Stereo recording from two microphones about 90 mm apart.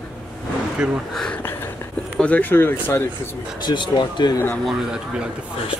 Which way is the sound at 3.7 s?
55° left (ahead or behind).